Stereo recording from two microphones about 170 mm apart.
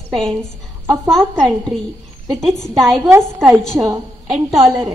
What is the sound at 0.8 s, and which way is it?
Speech, 15° right (ahead or behind).